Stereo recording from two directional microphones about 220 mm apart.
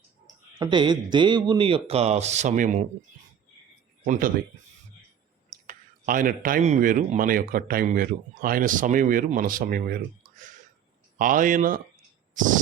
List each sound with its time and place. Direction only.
0.6 s speech: 20° right (ahead or behind)
4.0 s speech: 40° right (ahead or behind)
5.5 s speech: 35° right (ahead or behind)
12.3 s a sound: 35° right (ahead or behind)